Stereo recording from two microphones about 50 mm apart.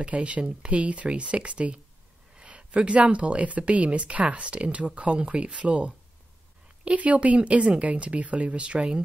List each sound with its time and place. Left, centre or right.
0.0 s speech: right